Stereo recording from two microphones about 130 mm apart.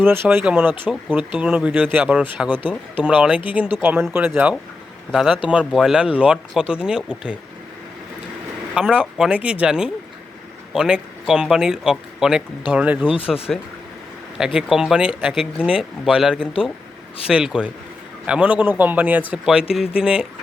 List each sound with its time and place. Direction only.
0.0 s speech: 15° right (ahead or behind)
5.1 s speech: 5° right (ahead or behind)
8.7 s speech: 10° right (ahead or behind)
13.5 s speech: centre (ahead or behind)
16.4 s speech: 45° left (ahead or behind)
17.2 s speech: 5° right (ahead or behind)